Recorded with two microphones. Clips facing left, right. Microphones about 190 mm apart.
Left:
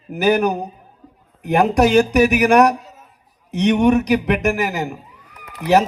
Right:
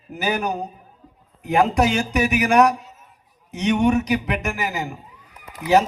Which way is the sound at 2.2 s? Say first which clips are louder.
Left 3 dB; 65° left (ahead or behind).